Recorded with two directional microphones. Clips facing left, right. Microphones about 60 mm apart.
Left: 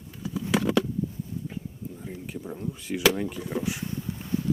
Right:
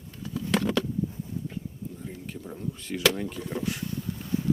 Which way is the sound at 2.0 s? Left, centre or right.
Centre.